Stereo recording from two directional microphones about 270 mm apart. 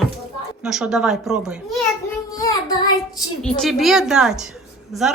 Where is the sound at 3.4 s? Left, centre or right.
Centre.